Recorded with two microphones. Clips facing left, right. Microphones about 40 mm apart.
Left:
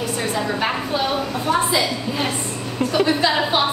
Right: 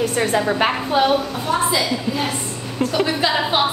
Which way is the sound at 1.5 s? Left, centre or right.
Centre.